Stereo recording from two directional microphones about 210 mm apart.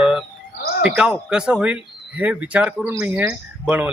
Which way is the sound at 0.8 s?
Centre (ahead or behind).